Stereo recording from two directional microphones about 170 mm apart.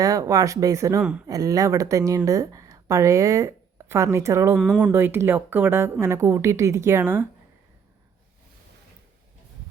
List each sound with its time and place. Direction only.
0.0 s speech: 20° right (ahead or behind)
4.5 s speech: centre (ahead or behind)
4.8 s speech: 10° right (ahead or behind)